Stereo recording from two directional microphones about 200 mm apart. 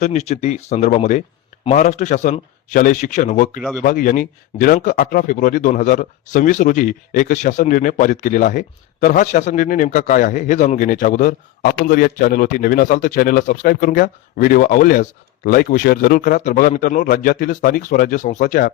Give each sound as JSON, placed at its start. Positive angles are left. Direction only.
{"t": 0.0, "sound": "a man's voice", "side_deg": 35}